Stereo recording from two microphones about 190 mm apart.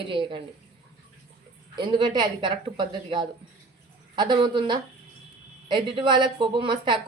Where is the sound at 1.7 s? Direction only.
25° right (ahead or behind).